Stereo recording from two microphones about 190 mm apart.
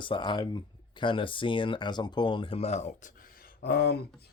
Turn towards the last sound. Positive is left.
turn(degrees=55)  # may be behind; listen again after turning